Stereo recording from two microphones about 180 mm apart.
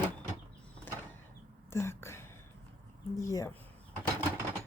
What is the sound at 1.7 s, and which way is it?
Whispering, 15° left (ahead or behind).